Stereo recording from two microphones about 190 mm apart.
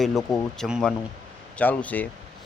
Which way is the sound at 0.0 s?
Centre (ahead or behind).